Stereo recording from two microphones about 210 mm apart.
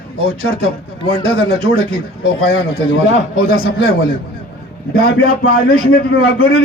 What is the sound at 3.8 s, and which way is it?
Speech, 70° left (ahead or behind).